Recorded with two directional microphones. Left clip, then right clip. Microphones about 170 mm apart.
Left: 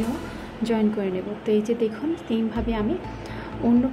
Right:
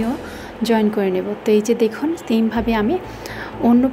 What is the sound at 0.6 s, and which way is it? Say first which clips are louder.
A woman's voice: right 7 dB; 10° right (ahead or behind).